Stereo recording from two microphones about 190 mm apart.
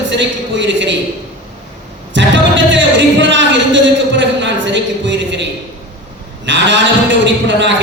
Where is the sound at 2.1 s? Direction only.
70° right (ahead or behind).